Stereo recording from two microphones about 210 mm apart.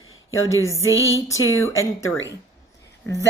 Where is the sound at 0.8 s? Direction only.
65° left (ahead or behind).